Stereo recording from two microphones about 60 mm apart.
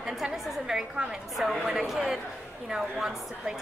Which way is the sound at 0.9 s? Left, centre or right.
Centre.